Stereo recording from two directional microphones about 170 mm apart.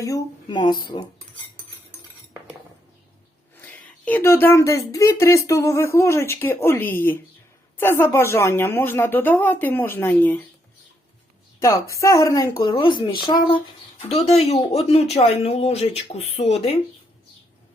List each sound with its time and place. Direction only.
0.0 s speech: 20° left (ahead or behind)
4.0 s speech: 10° left (ahead or behind)
11.6 s speech: 20° left (ahead or behind); by 16.7 s 35° left (ahead or behind)